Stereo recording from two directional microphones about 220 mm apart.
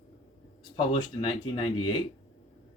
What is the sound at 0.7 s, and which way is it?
Speech, 25° left (ahead or behind).